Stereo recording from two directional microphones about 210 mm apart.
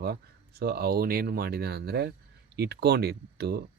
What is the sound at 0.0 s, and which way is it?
Speech, 50° right (ahead or behind).